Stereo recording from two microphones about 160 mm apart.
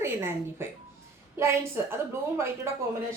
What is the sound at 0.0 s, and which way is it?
A woman's voice, 15° right (ahead or behind).